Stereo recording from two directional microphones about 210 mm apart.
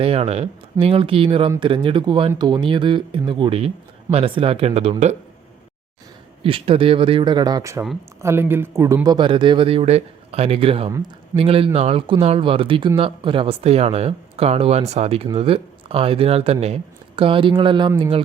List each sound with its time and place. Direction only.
0.0 s a man's voice: 30° right (ahead or behind)
6.4 s a man's voice: 25° right (ahead or behind)